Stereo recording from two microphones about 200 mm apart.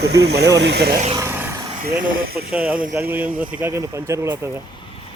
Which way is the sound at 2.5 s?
5° right (ahead or behind).